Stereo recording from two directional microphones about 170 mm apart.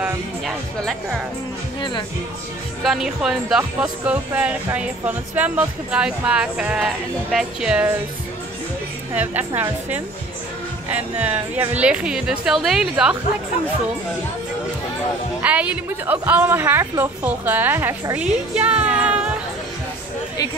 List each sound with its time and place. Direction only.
0.0 s speech: 5° right (ahead or behind)
1.8 s speech: 25° left (ahead or behind)
2.8 s speech: centre (ahead or behind)
9.1 s a woman's voice: 10° right (ahead or behind)
15.4 s a woman's voice: 10° right (ahead or behind)